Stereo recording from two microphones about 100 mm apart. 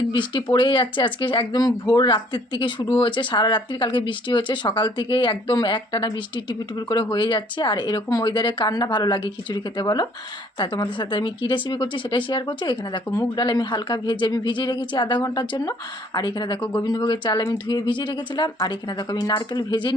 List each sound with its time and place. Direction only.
0.1 s speech: 50° left (ahead or behind)
1.6 s speech: 40° left (ahead or behind)
13.1 s speech: 40° left (ahead or behind)